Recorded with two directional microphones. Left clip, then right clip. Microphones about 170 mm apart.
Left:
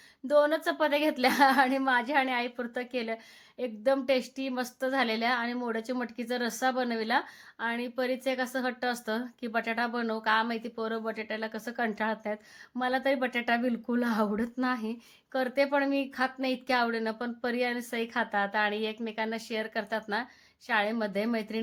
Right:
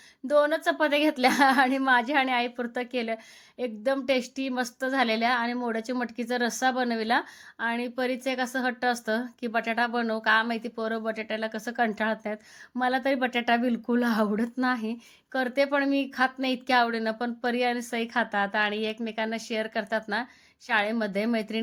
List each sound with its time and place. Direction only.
0.3 s a woman's voice: 20° right (ahead or behind)